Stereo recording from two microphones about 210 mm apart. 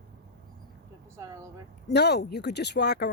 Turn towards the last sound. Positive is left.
turn(degrees=50)  # may be behind; listen again after turning